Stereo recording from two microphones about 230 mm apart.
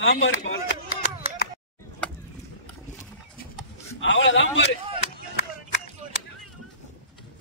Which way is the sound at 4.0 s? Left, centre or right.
Left.